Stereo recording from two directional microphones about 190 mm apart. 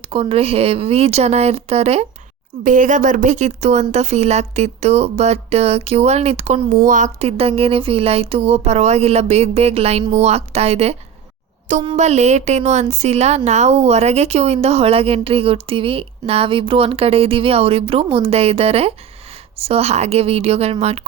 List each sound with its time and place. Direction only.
0.0 s a woman's voice: 30° right (ahead or behind)
2.6 s a woman's voice: 45° right (ahead or behind)